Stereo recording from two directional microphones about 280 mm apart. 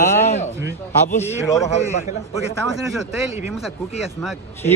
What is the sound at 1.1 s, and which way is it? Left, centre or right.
Speech, centre.